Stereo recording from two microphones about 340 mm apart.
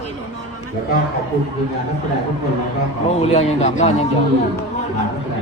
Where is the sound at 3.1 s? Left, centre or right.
Centre.